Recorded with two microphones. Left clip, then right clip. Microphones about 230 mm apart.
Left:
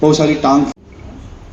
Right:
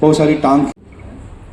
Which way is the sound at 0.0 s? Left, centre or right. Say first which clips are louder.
Even; right.